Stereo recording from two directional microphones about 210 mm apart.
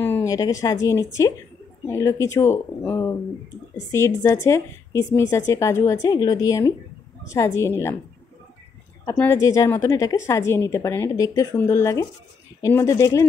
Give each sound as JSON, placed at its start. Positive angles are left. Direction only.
{"t": 0.0, "sound": "a woman's voice", "side_deg": 10}
{"t": 9.1, "sound": "a woman's voice", "side_deg": 10}